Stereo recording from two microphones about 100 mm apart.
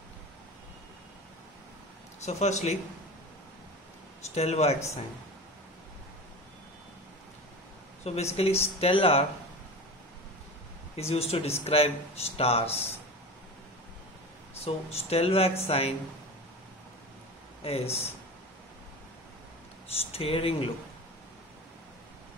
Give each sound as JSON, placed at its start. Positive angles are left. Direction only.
{"t": 2.2, "sound": "speech", "side_deg": 90}
{"t": 4.4, "sound": "speech", "side_deg": 90}
{"t": 8.0, "sound": "speech", "side_deg": 90}
{"t": 11.0, "sound": "speech", "side_deg": 90}
{"t": 14.6, "sound": "speech", "side_deg": 90}
{"t": 17.6, "sound": "speech", "side_deg": 85}
{"t": 20.1, "sound": "speech", "side_deg": 75}